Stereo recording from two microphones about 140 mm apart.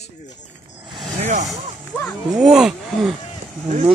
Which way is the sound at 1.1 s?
55° right (ahead or behind).